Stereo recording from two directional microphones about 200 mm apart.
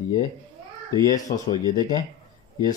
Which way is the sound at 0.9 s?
20° left (ahead or behind).